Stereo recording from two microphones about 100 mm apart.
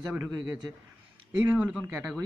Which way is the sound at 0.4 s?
45° right (ahead or behind).